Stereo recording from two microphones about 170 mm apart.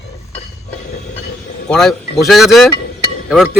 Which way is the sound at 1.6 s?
5° left (ahead or behind).